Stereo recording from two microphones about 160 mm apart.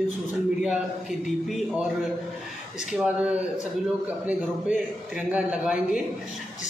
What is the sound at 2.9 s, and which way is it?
A man's voice, 10° right (ahead or behind).